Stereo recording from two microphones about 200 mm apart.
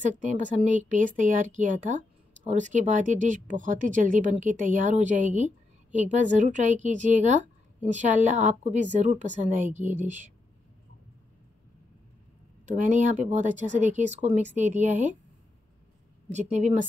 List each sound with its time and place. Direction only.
0.2 s speech: 40° right (ahead or behind)
12.6 s speech: 40° right (ahead or behind)
16.3 s speech: 35° right (ahead or behind)